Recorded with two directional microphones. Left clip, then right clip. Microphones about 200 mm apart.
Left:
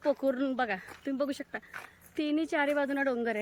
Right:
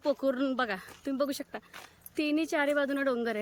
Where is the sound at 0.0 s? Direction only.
5° right (ahead or behind).